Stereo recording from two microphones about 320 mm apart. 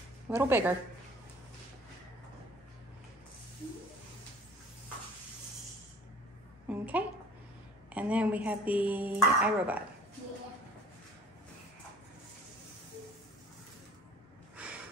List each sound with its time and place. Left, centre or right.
0.3 s speech: centre
6.7 s a sound: centre
7.9 s speech: centre
14.6 s snort: centre